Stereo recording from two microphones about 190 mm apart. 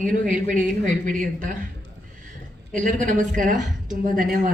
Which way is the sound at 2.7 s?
45° right (ahead or behind).